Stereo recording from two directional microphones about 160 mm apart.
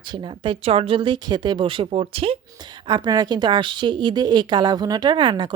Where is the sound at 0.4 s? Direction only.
35° right (ahead or behind).